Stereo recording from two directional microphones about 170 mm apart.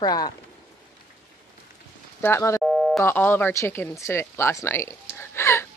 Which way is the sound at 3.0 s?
10° left (ahead or behind).